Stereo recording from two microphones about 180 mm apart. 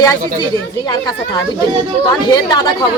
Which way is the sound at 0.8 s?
25° left (ahead or behind).